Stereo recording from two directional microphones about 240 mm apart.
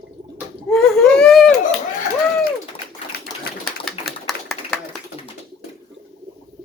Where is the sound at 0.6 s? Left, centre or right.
Centre.